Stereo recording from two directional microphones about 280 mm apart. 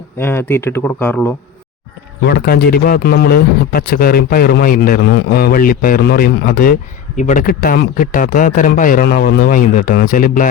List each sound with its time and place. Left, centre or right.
0.2 s speech: centre
2.2 s speech: left